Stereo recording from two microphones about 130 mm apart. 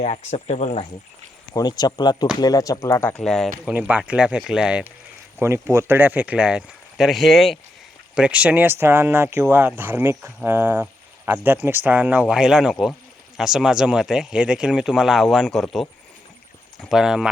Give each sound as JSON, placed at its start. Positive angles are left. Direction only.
{"t": 0.0, "sound": "speech", "side_deg": 60}
{"t": 1.5, "sound": "speech", "side_deg": 30}
{"t": 3.1, "sound": "speech", "side_deg": 5}
{"t": 3.7, "sound": "speech", "side_deg": -10}
{"t": 5.4, "sound": "speech", "side_deg": -20}